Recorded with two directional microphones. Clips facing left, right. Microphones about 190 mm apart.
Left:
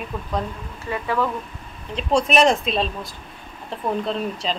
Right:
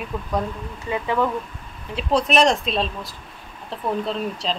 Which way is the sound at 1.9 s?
Centre (ahead or behind).